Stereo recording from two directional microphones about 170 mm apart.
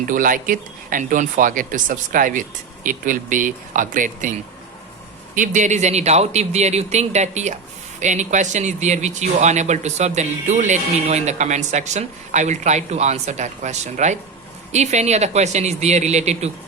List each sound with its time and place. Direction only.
0.1 s speech: 50° right (ahead or behind)
5.3 s speech: 50° right (ahead or behind)